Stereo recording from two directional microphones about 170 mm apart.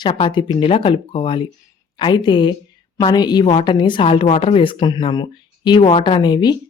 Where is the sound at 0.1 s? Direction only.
30° left (ahead or behind).